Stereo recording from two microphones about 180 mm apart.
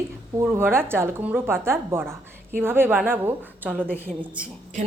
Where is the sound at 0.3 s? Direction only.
15° right (ahead or behind).